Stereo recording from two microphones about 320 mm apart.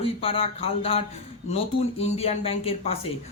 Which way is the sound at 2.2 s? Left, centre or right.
Centre.